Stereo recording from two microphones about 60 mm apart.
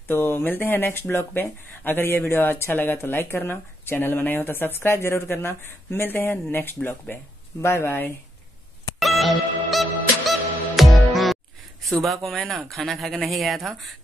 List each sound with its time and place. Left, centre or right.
0.1 s speech: left
9.0 s music: centre
11.8 s speech: centre